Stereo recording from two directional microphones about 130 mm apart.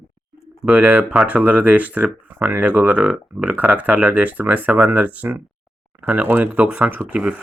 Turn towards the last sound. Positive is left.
turn(degrees=-10)  # may be behind; listen again after turning